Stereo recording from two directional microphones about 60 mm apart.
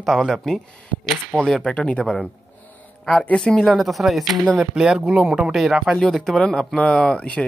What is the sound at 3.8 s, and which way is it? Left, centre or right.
Speech, centre.